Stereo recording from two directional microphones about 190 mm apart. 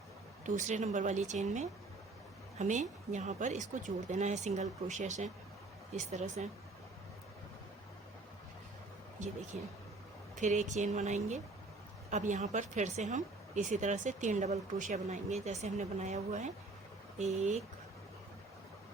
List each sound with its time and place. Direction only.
0.4 s speech: 40° right (ahead or behind)
9.2 s speech: 40° right (ahead or behind)